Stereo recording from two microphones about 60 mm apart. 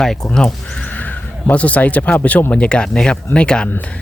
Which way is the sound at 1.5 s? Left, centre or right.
Left.